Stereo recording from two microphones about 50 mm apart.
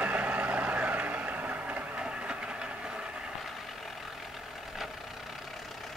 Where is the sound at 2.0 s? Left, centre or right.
Centre.